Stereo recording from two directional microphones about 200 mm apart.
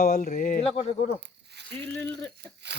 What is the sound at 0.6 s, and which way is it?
Speech, 30° left (ahead or behind).